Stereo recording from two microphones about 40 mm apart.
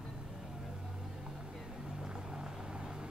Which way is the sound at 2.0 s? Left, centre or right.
Centre.